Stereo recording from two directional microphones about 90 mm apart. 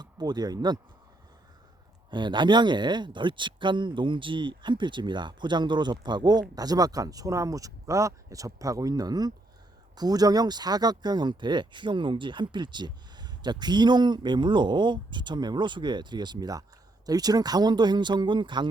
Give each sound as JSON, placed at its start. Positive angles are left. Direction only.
{"t": 0.0, "sound": "speech", "side_deg": -50}
{"t": 2.0, "sound": "speech", "side_deg": -60}